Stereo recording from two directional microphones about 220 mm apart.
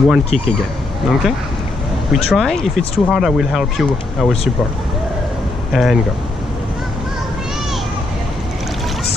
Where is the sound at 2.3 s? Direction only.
Centre (ahead or behind).